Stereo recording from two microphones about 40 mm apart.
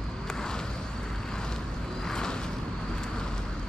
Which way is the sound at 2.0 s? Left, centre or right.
Centre.